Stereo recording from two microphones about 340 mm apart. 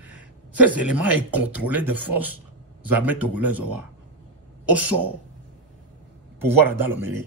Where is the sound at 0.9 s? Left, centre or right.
Right.